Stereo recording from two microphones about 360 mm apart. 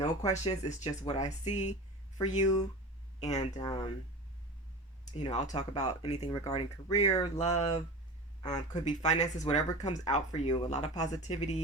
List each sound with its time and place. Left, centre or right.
0.0 s speech: centre
5.2 s speech: centre